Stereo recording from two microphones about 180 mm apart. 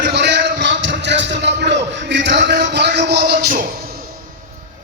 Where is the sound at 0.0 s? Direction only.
70° right (ahead or behind).